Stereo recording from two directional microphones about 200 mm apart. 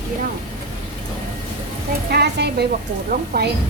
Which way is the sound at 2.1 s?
55° right (ahead or behind).